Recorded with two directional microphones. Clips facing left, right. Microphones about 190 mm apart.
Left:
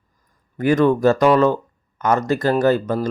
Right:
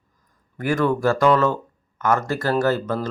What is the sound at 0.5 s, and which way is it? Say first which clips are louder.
Speech: left 5 dB; 20° left (ahead or behind).